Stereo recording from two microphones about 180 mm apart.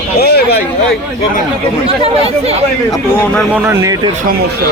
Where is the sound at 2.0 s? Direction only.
35° right (ahead or behind).